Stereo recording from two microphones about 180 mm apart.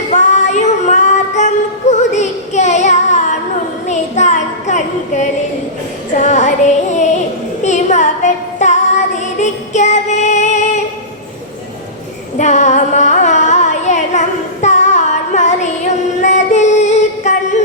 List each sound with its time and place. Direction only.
0.1 s female singing: 40° left (ahead or behind)
3.8 s child singing: 40° left (ahead or behind)
6.1 s music: 40° left (ahead or behind)
7.6 s child singing: 40° left (ahead or behind)
12.4 s carnatic music: 40° left (ahead or behind)